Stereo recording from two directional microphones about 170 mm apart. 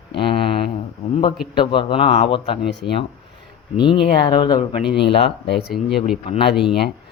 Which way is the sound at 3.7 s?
30° left (ahead or behind).